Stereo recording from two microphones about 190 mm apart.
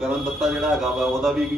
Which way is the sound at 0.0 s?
Centre (ahead or behind).